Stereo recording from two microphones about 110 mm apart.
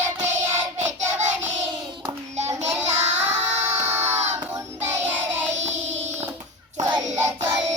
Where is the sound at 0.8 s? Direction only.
90° right.